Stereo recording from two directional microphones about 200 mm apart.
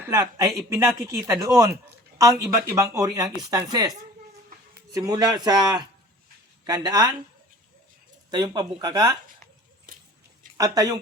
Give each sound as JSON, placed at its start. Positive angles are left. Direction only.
{"t": 0.1, "sound": "a man's voice", "side_deg": -15}
{"t": 8.3, "sound": "a man's voice", "side_deg": -20}
{"t": 9.9, "sound": "a sound", "side_deg": -45}
{"t": 10.6, "sound": "a man's voice", "side_deg": -20}